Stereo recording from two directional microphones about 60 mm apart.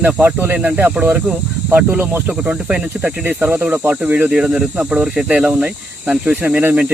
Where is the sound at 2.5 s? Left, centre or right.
Centre.